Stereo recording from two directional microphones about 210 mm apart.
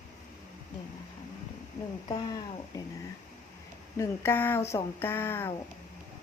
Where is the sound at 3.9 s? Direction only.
15° left (ahead or behind).